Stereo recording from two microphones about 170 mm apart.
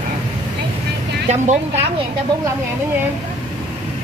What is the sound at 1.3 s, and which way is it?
Speech, 45° right (ahead or behind).